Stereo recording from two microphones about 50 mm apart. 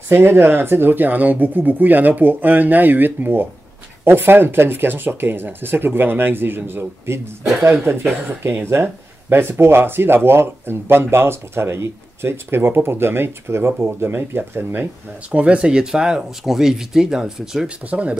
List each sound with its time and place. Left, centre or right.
0.1 s speech: right
15.3 s speech: right
17.8 s speech: right